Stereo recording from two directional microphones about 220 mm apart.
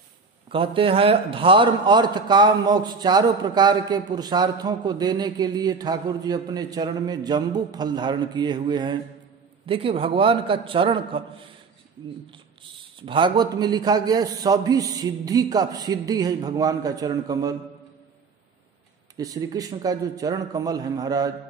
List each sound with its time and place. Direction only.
0.5 s a man's voice: 25° right (ahead or behind)
13.0 s a man's voice: 20° right (ahead or behind)
19.1 s a man's voice: 15° right (ahead or behind)